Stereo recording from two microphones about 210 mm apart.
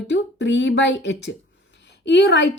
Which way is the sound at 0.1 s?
60° left (ahead or behind).